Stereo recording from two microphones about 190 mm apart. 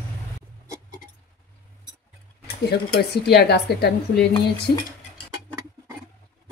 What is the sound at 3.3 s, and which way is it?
Speech, 60° left (ahead or behind).